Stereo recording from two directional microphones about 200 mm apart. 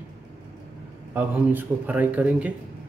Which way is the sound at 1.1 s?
10° right (ahead or behind).